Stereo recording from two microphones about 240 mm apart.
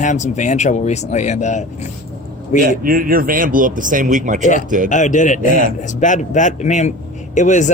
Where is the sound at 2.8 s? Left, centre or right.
Right.